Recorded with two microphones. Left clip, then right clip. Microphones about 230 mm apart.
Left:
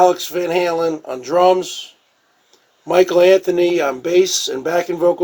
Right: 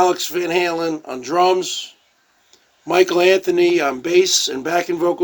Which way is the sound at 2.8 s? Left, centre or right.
Right.